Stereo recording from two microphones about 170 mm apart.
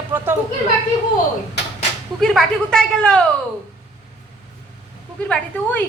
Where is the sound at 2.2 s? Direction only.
5° left (ahead or behind).